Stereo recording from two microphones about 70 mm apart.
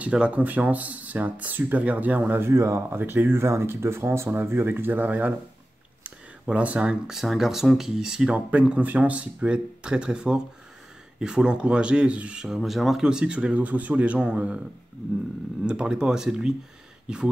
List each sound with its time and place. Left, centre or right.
0.0 s speech: centre
2.4 s speech: right
2.9 s speech: right
6.0 s a sound: centre
6.9 s speech: centre
15.6 s speech: centre